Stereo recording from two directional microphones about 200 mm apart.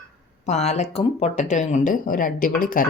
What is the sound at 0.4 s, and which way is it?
Speech, 35° left (ahead or behind).